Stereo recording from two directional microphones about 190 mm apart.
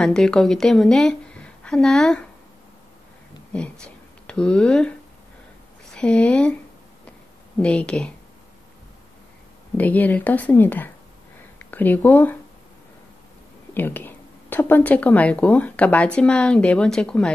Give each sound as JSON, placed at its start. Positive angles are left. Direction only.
{"t": 0.0, "sound": "a woman's voice", "side_deg": 5}
{"t": 3.8, "sound": "speech", "side_deg": 5}
{"t": 5.9, "sound": "speech", "side_deg": 5}
{"t": 7.6, "sound": "speech", "side_deg": 5}
{"t": 9.8, "sound": "a woman's voice", "side_deg": 10}
{"t": 13.7, "sound": "a woman's voice", "side_deg": 10}